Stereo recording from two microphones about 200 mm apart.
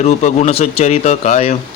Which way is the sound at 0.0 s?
35° left (ahead or behind).